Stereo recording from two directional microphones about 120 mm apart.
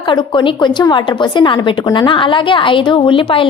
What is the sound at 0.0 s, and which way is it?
A woman's voice, 40° left (ahead or behind).